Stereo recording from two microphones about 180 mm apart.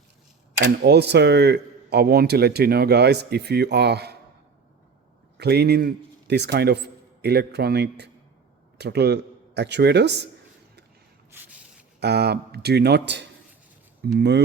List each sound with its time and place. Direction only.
0.6 s speech: 65° right (ahead or behind)
5.4 s a man's voice: 65° right (ahead or behind)
11.3 s rub: 10° right (ahead or behind)
11.9 s speech: 65° right (ahead or behind)